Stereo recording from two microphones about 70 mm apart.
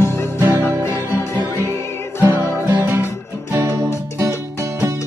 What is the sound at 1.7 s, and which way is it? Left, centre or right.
Music, left.